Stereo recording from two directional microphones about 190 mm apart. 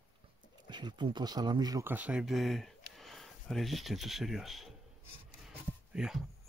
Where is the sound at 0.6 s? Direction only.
25° right (ahead or behind); by 4.7 s centre (ahead or behind).